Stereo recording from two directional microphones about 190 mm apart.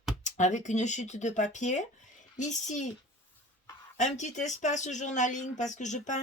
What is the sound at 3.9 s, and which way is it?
Speech, 40° left (ahead or behind).